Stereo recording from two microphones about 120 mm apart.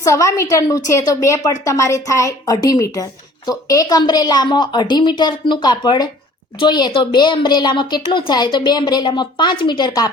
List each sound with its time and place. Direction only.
0.0 s a woman's voice: 25° left (ahead or behind)